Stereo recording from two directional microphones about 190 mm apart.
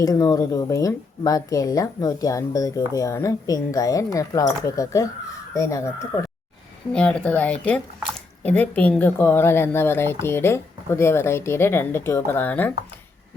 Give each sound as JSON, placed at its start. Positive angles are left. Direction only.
{"t": 0.0, "sound": "speech", "side_deg": 20}